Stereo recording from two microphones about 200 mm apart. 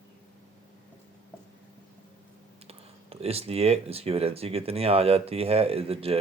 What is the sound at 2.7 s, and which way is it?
Speech, 30° right (ahead or behind).